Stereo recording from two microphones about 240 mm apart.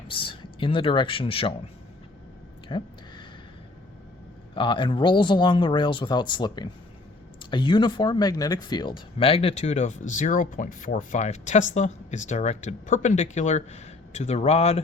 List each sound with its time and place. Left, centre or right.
0.1 s speech: left
2.6 s a sound: centre
4.5 s speech: centre